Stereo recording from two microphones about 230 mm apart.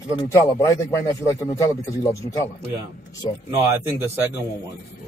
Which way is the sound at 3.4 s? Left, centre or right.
Centre.